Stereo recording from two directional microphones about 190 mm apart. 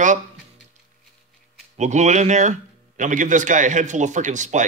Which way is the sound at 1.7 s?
35° right (ahead or behind).